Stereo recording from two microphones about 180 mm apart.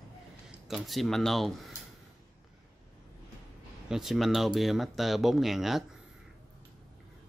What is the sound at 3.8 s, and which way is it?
Speech, 5° right (ahead or behind).